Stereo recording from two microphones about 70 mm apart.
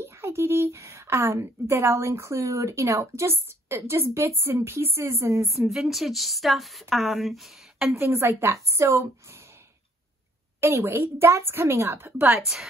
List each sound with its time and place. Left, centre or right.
0.0 s a woman's voice: right
5.5 s a woman's voice: centre
7.9 s a woman's voice: right
10.6 s a woman's voice: right